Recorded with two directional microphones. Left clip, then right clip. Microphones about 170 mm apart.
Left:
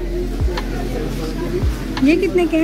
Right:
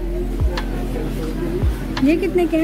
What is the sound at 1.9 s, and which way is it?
Speech, 10° right (ahead or behind).